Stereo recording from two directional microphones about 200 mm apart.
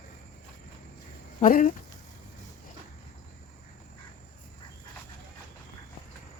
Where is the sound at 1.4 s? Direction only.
40° left (ahead or behind).